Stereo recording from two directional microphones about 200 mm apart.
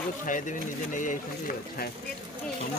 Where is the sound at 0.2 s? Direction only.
40° left (ahead or behind).